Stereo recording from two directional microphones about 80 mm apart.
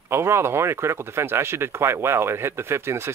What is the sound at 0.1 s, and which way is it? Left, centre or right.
Speech, right.